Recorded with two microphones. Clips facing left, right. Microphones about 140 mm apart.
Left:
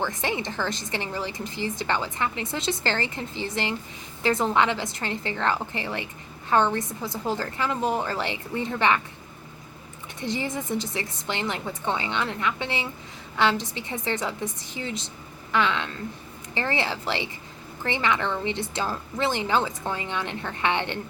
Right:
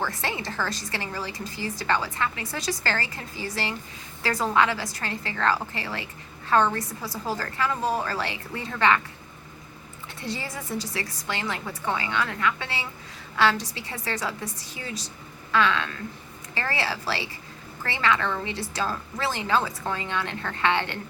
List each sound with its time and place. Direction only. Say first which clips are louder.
0.0 s a woman's voice: left 2 dB; 20° left (ahead or behind)
10.2 s a woman's voice: left 5 dB; 20° left (ahead or behind)